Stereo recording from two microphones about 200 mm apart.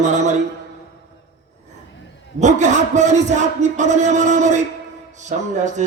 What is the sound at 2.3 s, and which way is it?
A man's voice, 35° right (ahead or behind).